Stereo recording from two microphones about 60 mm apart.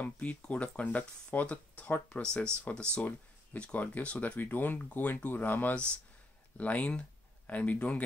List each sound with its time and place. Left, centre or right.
0.0 s speech: left